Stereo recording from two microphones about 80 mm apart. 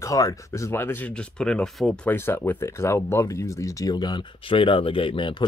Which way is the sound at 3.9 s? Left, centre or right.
Left.